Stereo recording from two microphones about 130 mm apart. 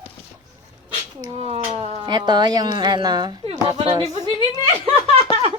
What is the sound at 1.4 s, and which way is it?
Speech, 50° right (ahead or behind).